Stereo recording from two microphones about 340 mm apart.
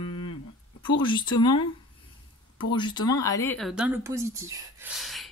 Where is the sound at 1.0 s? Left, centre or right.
Centre.